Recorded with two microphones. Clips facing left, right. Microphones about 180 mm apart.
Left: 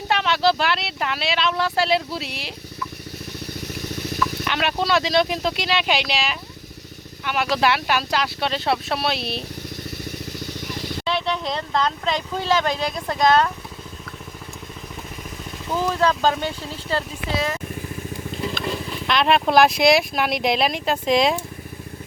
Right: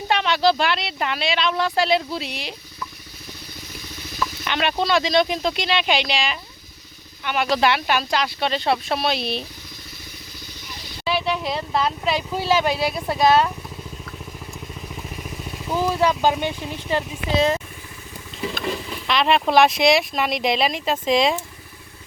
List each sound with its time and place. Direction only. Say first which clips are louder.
0.1 s speech: right 1 dB; centre (ahead or behind)
3.8 s vehicle: left 2 dB; 70° left (ahead or behind)
4.4 s speech: right 2 dB; 5° left (ahead or behind)
11.0 s speech: right 2 dB; 5° right (ahead or behind)
15.6 s speech: right 1 dB; 10° right (ahead or behind)
19.0 s speech: even; centre (ahead or behind)